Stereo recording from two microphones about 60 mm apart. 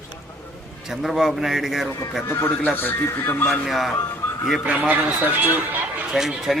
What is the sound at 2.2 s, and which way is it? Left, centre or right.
A man's voice, left.